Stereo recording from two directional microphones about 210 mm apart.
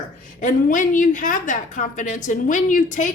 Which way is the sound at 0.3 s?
35° left (ahead or behind).